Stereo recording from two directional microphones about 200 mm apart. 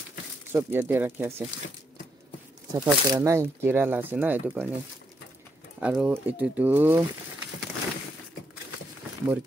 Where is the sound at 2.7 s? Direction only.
20° right (ahead or behind).